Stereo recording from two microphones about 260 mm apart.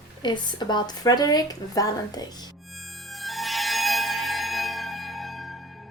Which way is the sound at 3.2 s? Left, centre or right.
Centre.